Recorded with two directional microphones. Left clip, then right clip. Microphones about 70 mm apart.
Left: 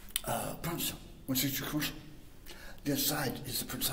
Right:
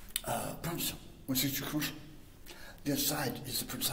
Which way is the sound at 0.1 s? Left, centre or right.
Left.